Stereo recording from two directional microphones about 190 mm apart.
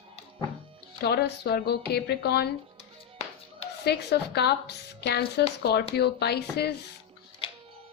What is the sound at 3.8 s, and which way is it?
A woman's voice, 60° left (ahead or behind).